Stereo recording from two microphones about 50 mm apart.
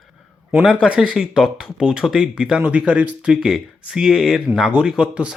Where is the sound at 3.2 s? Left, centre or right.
Centre.